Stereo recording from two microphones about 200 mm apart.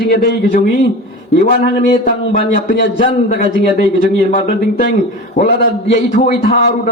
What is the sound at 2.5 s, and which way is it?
A man's voice, 50° left (ahead or behind).